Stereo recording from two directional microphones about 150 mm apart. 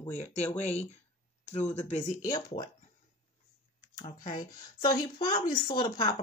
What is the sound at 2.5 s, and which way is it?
Speech, 35° left (ahead or behind).